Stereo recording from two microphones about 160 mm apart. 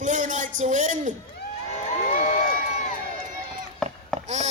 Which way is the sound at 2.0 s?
55° left (ahead or behind).